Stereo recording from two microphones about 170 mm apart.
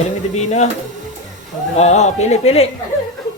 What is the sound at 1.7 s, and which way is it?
Speech, 40° left (ahead or behind).